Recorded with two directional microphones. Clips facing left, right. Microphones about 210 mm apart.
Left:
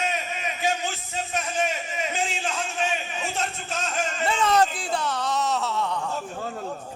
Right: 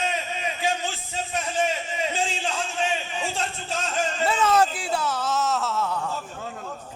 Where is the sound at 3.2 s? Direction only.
30° right (ahead or behind).